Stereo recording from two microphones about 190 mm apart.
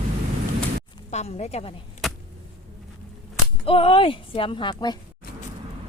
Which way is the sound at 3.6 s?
30° left (ahead or behind).